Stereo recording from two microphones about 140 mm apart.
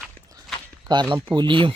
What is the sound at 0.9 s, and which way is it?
Speech, 35° right (ahead or behind).